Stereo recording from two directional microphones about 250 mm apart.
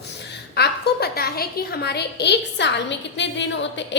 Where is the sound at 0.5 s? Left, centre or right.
Left.